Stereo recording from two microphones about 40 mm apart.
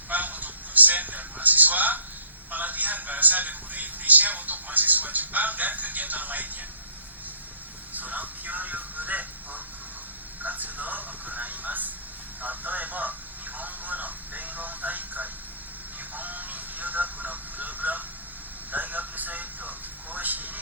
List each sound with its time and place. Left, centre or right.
0.1 s a sound: right
2.5 s a man's voice: right
7.9 s music: right
10.4 s a man's voice: right
13.6 s a sound: right
18.7 s television: right